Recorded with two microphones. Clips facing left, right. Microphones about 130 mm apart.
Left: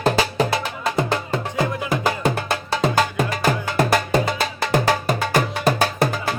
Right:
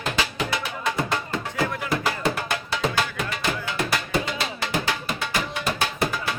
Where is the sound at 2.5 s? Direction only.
40° left (ahead or behind).